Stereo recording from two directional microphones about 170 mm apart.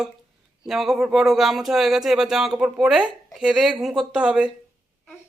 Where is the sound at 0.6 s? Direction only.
Centre (ahead or behind).